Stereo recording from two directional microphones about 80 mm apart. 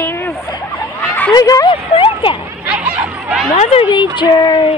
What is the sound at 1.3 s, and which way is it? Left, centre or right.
Speech, left.